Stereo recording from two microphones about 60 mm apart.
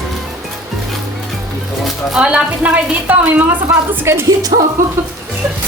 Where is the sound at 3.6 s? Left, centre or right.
Right.